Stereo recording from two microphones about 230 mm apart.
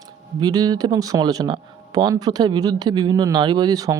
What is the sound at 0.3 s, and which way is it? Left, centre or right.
Speech, centre.